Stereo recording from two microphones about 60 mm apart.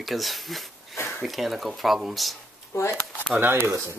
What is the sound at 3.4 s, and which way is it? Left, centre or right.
Speech, right.